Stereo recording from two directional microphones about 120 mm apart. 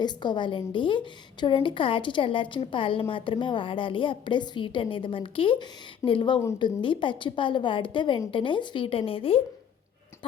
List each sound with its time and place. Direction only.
0.0 s a woman's voice: 40° left (ahead or behind)